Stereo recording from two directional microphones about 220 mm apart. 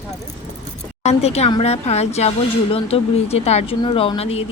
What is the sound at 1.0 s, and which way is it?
Speech, 30° left (ahead or behind).